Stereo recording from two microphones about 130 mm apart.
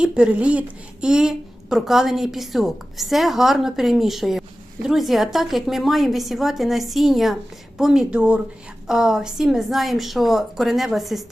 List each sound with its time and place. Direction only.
0.0 s a woman's voice: 10° right (ahead or behind)